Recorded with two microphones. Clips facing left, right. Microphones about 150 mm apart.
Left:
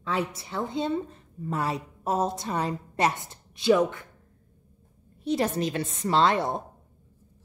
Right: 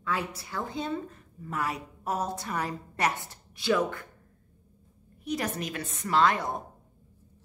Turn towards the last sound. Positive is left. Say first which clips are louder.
# left 2 dB
turn(degrees=25)  # may be behind; listen again after turning